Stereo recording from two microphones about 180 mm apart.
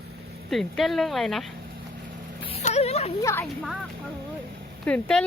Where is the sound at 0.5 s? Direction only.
Centre (ahead or behind).